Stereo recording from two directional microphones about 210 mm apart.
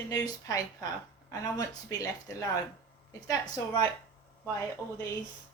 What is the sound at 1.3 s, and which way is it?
Speech, 20° left (ahead or behind).